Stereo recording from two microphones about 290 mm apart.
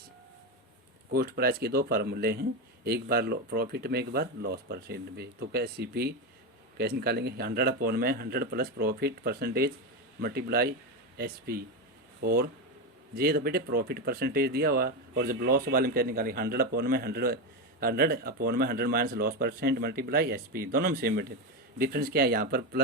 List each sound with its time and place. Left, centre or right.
1.1 s speech: right